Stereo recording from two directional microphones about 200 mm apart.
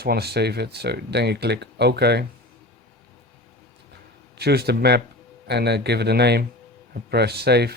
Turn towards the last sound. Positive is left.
turn(degrees=-55)  # may be behind; listen again after turning